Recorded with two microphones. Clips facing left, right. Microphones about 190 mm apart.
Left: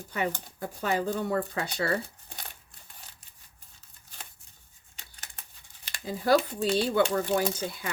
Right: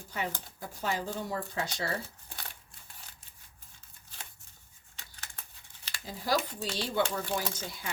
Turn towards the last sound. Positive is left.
turn(degrees=60)  # may be behind; listen again after turning